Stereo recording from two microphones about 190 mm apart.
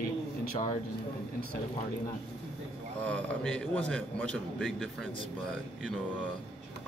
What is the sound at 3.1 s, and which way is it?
A man's voice, 5° left (ahead or behind).